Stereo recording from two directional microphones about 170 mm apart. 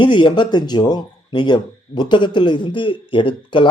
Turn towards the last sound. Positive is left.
turn(degrees=30)  # may be behind; listen again after turning